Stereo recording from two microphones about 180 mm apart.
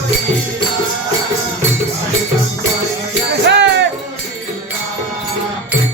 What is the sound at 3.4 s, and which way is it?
Music, 80° right.